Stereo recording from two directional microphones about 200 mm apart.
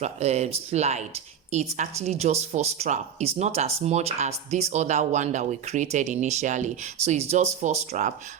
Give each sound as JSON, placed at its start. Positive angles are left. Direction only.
{"t": 0.0, "sound": "speech", "side_deg": -35}